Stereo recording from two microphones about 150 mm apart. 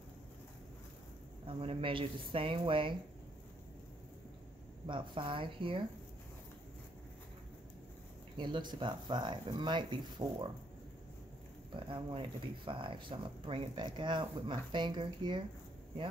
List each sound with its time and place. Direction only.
1.5 s speech: 35° right (ahead or behind)
4.8 s speech: 35° right (ahead or behind)
8.4 s speech: 30° right (ahead or behind)
11.9 s speech: 35° right (ahead or behind)